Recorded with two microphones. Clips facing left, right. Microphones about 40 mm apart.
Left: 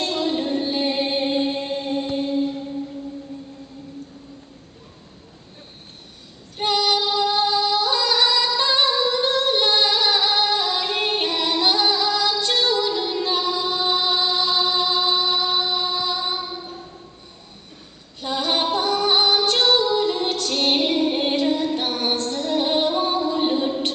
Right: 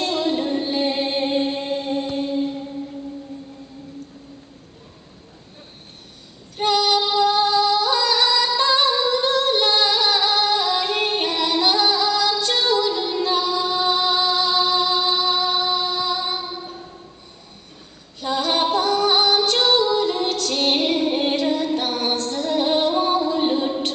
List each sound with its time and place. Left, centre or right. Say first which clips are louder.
0.0 s music: right 1 dB; centre
6.6 s female singing: right 2 dB; centre
7.0 s music: right 2 dB; centre
7.2 s music: right 3 dB; centre
9.2 s singing: right 1 dB; centre
12.5 s music: right 1 dB; centre
13.6 s music: right 2 dB; centre
18.2 s female singing: right 2 dB; centre
22.3 s music: right 3 dB; centre